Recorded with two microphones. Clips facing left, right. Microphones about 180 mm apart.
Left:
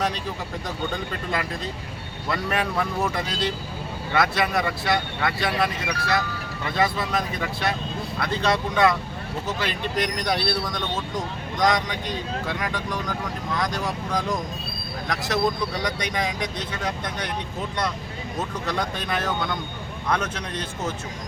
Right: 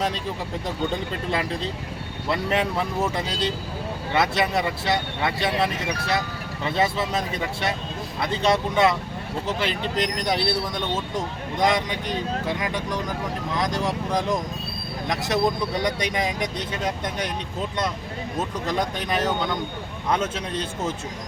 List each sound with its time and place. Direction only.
1.3 s speech: 25° right (ahead or behind)
4.1 s speech: 25° right (ahead or behind)
18.6 s speech: 20° right (ahead or behind)